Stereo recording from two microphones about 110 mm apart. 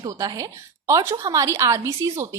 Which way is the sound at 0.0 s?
35° right (ahead or behind).